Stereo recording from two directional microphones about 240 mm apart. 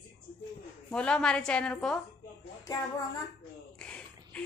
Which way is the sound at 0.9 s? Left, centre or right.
Centre.